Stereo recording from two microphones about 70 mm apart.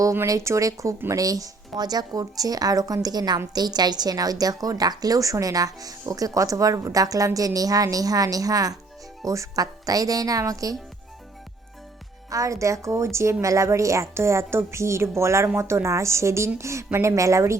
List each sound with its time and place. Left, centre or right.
0.3 s a woman's voice: right
12.3 s a woman's voice: right